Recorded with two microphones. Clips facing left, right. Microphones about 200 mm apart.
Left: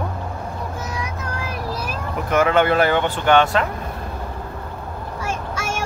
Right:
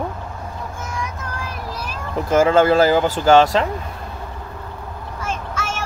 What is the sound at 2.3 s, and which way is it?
Speech, 30° right (ahead or behind).